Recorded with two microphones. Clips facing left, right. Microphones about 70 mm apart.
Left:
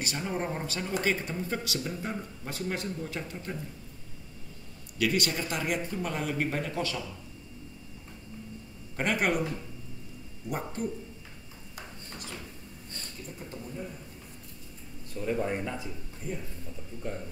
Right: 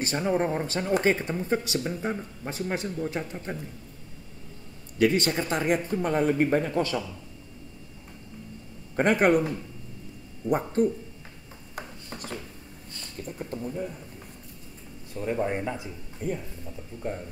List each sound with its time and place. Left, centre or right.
0.0 s speech: right
1.1 s speech: right
4.9 s speech: right
8.9 s speech: right
10.5 s speech: right
13.2 s speech: right
15.1 s speech: right
16.2 s speech: right